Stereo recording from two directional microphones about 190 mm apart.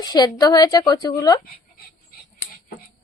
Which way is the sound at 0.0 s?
20° left (ahead or behind).